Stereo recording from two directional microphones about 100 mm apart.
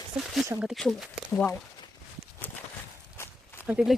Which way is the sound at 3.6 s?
10° right (ahead or behind).